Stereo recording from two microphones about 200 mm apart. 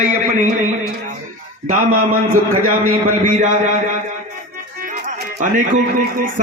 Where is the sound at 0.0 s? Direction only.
40° right (ahead or behind).